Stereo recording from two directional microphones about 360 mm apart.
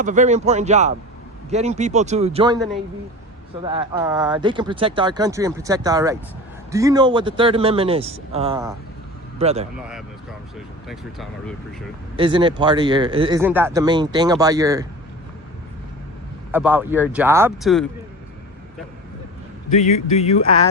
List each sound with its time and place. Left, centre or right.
0.0 s speech: centre
3.6 s speech: centre
12.1 s speech: centre
16.5 s speech: centre
19.7 s speech: centre